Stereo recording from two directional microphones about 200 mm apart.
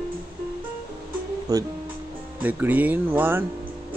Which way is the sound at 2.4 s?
10° right (ahead or behind).